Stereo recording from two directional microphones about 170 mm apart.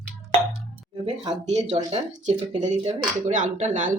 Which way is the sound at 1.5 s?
40° right (ahead or behind).